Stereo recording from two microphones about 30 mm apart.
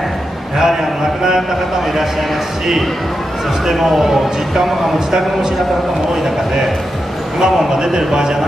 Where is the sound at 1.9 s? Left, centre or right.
Centre.